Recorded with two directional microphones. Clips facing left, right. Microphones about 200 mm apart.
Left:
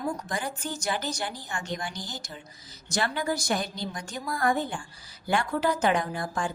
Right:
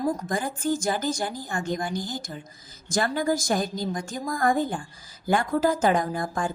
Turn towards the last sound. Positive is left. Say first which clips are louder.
# right 3 dB
turn(degrees=-45)  # may be behind; listen again after turning